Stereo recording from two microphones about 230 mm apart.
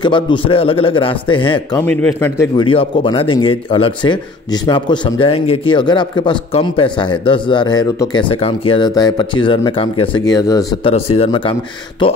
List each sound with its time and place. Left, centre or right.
0.0 s a man's voice: left
1.8 s a man's voice: centre
2.7 s a man's voice: left